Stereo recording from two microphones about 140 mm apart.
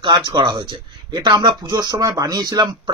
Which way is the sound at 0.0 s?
35° right (ahead or behind).